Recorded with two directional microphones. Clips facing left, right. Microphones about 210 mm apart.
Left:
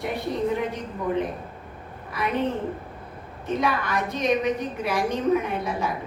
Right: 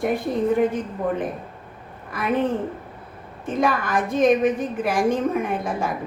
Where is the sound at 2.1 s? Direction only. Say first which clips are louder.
Even; 50° right (ahead or behind).